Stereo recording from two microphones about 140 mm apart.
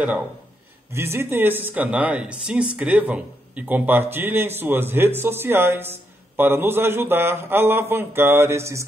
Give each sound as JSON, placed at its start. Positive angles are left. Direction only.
{"t": 0.9, "sound": "speech", "side_deg": -15}